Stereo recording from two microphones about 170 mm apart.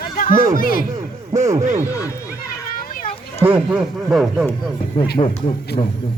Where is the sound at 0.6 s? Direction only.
55° left (ahead or behind).